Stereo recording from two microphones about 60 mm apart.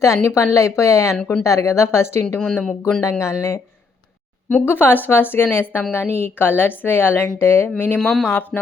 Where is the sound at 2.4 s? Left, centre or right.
Centre.